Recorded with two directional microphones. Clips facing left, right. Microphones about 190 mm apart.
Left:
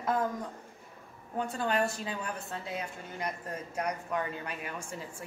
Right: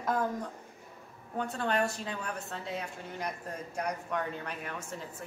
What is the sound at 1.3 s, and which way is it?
Speech, 5° left (ahead or behind).